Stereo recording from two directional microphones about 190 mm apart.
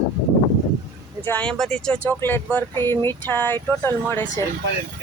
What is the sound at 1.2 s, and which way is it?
Speech, 5° left (ahead or behind).